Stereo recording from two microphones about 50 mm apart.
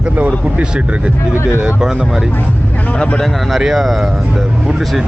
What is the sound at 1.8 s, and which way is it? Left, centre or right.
Speech, centre.